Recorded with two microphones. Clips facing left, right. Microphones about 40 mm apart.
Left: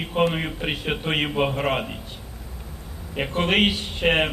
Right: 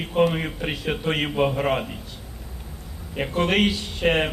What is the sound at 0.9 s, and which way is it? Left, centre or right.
Speech, left.